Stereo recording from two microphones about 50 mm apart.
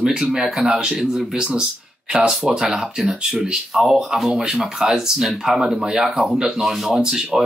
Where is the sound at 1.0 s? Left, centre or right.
Centre.